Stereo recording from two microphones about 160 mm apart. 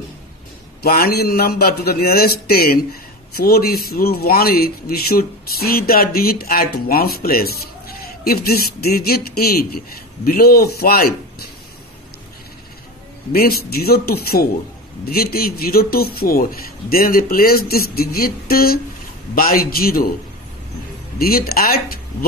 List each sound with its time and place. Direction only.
0.8 s speech: 70° left (ahead or behind)
13.3 s speech: 75° left (ahead or behind)
21.2 s speech: 70° left (ahead or behind)